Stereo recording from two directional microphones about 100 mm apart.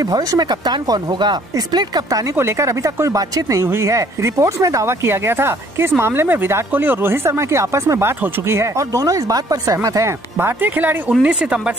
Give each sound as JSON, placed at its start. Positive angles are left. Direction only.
{"t": 0.0, "sound": "speech", "side_deg": -40}
{"t": 2.3, "sound": "speech", "side_deg": -25}
{"t": 10.3, "sound": "speech", "side_deg": -20}